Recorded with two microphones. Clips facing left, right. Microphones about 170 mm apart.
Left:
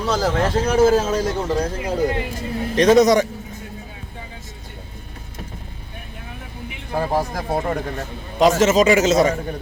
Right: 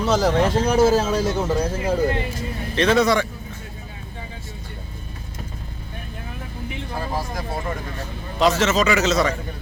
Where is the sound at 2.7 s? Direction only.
40° left (ahead or behind).